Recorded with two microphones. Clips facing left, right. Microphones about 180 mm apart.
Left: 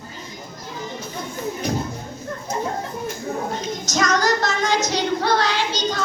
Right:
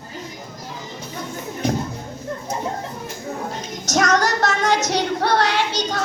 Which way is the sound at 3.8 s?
65° right (ahead or behind).